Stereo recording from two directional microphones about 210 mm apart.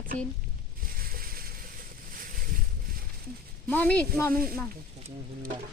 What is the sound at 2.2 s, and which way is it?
Boat, 45° right (ahead or behind).